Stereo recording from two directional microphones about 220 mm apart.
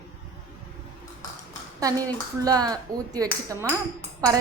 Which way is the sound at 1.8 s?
15° right (ahead or behind).